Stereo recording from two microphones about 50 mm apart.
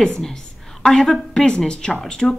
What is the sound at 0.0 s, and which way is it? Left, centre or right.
A woman's voice, centre.